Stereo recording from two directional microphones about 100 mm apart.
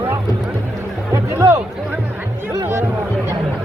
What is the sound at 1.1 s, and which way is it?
Music, 30° right (ahead or behind).